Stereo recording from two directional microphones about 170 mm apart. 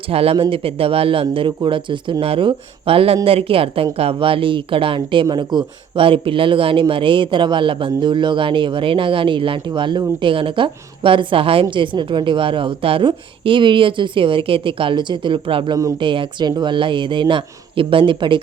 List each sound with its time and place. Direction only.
0.1 s a woman's voice: 35° right (ahead or behind)